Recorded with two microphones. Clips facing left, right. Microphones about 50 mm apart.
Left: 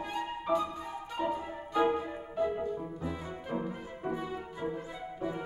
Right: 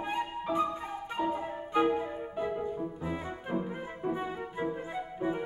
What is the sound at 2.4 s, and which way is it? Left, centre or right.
Music, right.